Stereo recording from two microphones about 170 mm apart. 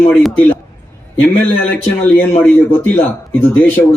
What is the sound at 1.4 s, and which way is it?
A man's voice, 10° left (ahead or behind).